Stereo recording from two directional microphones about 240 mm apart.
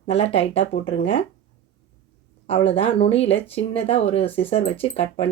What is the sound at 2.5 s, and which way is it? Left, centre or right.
Speech, left.